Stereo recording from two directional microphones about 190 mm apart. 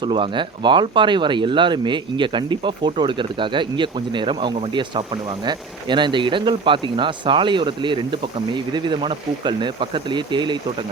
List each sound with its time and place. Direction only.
0.0 s speech: 25° right (ahead or behind)